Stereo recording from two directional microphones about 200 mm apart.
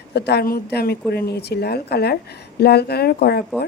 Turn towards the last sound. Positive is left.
turn(degrees=50)  # may be behind; listen again after turning